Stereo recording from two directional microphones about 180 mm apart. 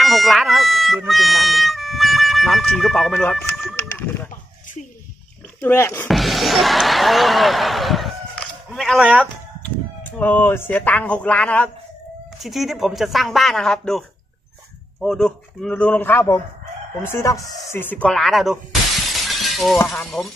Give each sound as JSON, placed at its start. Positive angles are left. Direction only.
{"t": 0.0, "sound": "speech", "side_deg": 0}
{"t": 5.6, "sound": "a man's voice", "side_deg": 15}
{"t": 6.0, "sound": "speech", "side_deg": 0}
{"t": 10.0, "sound": "a man's voice", "side_deg": 10}